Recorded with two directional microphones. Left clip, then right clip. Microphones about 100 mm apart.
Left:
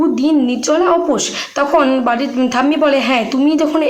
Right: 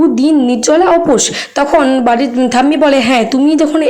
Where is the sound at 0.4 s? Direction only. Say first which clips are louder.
Right 4 dB; 40° right (ahead or behind).